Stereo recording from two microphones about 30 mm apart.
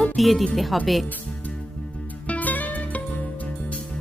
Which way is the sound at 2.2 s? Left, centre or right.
Left.